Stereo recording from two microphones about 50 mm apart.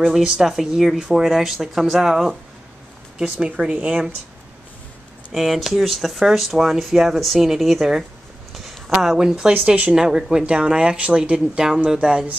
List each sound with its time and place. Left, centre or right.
0.0 s speech: centre
5.3 s speech: centre
8.5 s a sound: centre
9.0 s speech: centre